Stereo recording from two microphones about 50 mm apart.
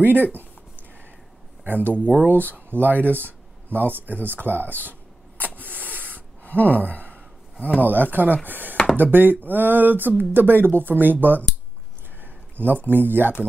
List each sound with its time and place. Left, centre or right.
0.0 s speech: right
1.6 s speech: right
6.0 s gasp: left
7.8 s speech: right
12.2 s a sound: right
12.8 s speech: right